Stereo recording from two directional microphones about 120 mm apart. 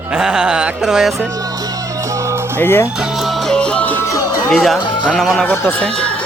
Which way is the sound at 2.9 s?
5° right (ahead or behind).